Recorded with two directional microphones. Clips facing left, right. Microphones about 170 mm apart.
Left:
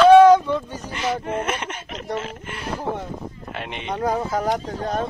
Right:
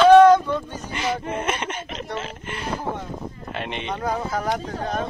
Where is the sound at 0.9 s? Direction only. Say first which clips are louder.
Left 1 dB; centre (ahead or behind).